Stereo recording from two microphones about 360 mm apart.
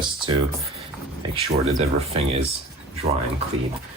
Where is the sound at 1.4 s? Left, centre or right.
Centre.